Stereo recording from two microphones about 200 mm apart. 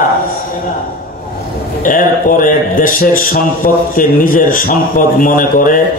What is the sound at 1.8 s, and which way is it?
A man's voice, 40° left (ahead or behind).